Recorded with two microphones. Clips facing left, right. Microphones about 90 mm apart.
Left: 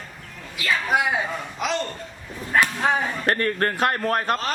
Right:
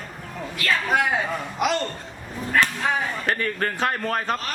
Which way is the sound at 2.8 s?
25° left (ahead or behind).